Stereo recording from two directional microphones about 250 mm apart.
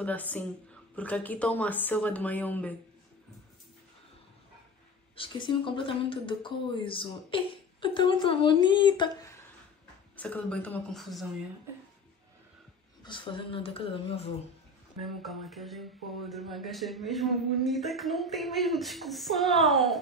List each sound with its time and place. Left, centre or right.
0.0 s speech: centre
5.1 s speech: centre
10.1 s speech: centre
13.0 s speech: centre
15.0 s speech: centre